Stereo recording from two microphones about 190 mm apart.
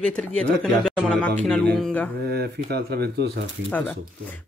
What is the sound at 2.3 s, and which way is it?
Speech, 55° right (ahead or behind).